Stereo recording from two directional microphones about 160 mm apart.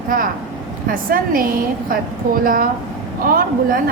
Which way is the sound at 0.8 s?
65° right (ahead or behind).